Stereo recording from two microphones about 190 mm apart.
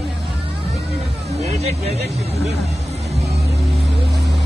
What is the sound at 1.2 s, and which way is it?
Hubbub, 35° right (ahead or behind).